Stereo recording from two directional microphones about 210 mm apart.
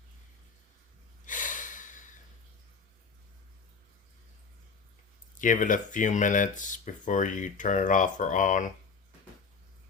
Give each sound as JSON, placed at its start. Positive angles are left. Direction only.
{"t": 1.2, "sound": "gasp", "side_deg": 40}
{"t": 5.4, "sound": "speech", "side_deg": 40}